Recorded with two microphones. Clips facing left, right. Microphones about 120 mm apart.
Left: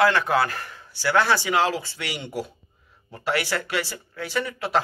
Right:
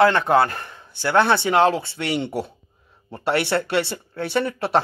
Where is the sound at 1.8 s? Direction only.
60° right (ahead or behind).